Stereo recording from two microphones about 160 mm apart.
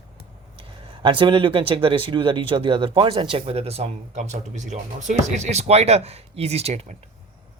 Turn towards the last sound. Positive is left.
turn(degrees=-40)  # may be behind; listen again after turning